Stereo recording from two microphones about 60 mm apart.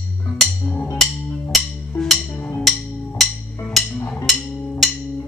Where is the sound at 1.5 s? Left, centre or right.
Centre.